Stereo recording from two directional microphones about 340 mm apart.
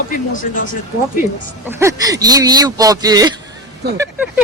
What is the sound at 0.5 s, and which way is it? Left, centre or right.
Speech, left.